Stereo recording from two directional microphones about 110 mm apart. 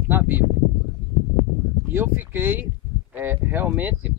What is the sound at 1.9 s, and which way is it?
Speech, 20° right (ahead or behind).